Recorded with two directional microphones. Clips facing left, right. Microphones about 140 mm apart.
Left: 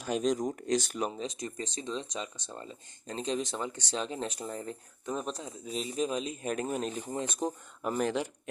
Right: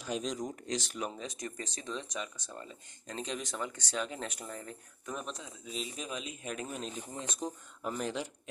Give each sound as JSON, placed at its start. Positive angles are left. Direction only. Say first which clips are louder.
{"t": 0.0, "sound": "speech", "louder": "left 6 dB", "side_deg": 50}
{"t": 1.3, "sound": "speech", "louder": "left 3 dB", "side_deg": 25}